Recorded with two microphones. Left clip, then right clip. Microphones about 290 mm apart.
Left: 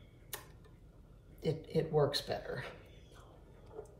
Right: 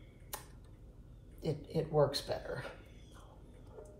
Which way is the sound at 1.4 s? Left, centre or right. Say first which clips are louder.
Left 2 dB; centre.